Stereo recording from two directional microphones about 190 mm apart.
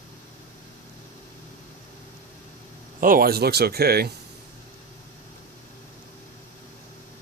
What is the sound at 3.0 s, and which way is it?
Speech, 50° right (ahead or behind).